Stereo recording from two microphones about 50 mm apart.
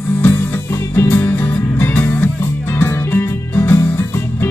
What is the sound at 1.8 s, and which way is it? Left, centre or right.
Music, left.